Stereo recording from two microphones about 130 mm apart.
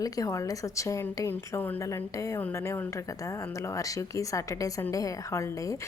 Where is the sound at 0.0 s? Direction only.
25° left (ahead or behind).